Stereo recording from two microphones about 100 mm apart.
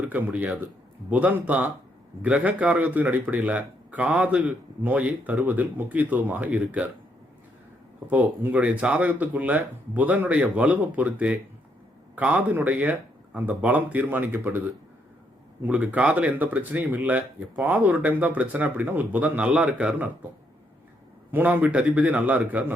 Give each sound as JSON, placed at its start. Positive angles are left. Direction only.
{"t": 0.2, "sound": "a man's voice", "side_deg": -15}
{"t": 8.0, "sound": "a man's voice", "side_deg": -15}
{"t": 15.6, "sound": "a man's voice", "side_deg": -15}
{"t": 21.3, "sound": "a man's voice", "side_deg": -20}